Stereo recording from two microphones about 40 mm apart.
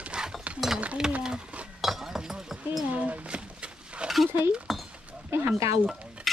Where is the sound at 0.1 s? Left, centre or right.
Right.